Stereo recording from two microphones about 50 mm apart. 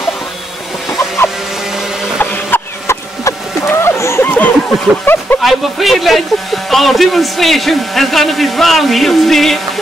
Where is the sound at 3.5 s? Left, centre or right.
Left.